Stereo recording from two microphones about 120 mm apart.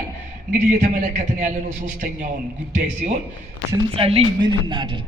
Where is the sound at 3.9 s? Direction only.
50° right (ahead or behind).